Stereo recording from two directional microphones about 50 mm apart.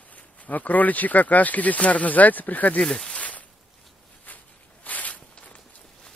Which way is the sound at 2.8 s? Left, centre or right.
Centre.